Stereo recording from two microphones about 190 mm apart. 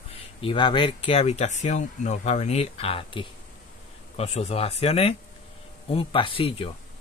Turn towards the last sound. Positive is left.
turn(degrees=30)  # may be behind; listen again after turning